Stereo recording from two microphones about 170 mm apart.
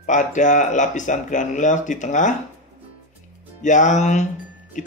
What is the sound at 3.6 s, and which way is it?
Speech, 45° left (ahead or behind).